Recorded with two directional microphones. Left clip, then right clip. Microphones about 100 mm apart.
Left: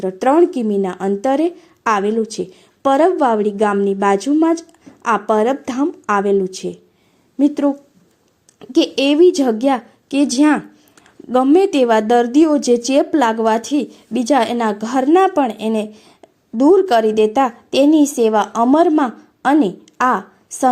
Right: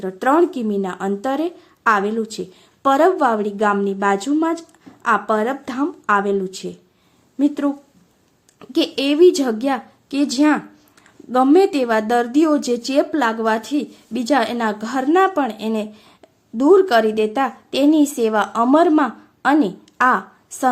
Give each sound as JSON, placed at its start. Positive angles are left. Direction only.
{"t": 0.0, "sound": "a woman's voice", "side_deg": 30}
{"t": 8.7, "sound": "a woman's voice", "side_deg": 25}